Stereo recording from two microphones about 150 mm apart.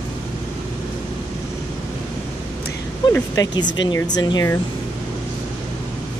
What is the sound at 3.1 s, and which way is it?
Speech, 25° left (ahead or behind).